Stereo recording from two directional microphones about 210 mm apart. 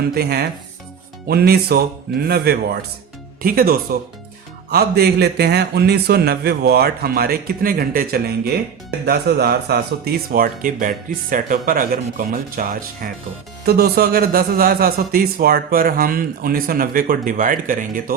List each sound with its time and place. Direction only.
0.1 s a man's voice: 50° right (ahead or behind)